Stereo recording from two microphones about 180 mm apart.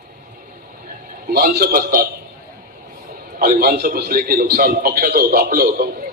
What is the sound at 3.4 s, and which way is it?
A man's voice, 55° right (ahead or behind).